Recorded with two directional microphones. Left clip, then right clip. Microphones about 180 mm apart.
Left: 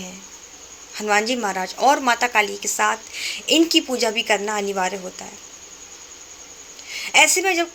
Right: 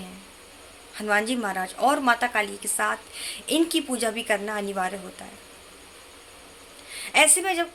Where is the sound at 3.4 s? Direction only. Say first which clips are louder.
Left 7 dB; 10° left (ahead or behind).